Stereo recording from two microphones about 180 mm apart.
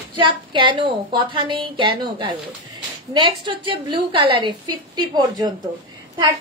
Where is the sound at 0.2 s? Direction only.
25° right (ahead or behind).